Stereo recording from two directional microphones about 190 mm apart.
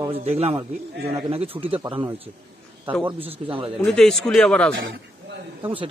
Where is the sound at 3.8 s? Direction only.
5° left (ahead or behind).